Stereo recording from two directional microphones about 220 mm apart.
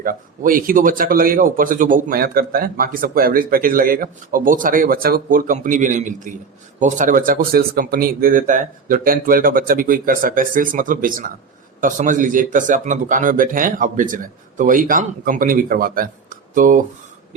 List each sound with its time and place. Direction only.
0.0 s speech: 40° right (ahead or behind)